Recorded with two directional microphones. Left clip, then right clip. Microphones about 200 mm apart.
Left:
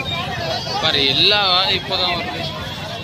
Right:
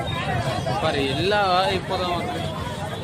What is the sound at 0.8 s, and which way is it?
Speech, 25° right (ahead or behind).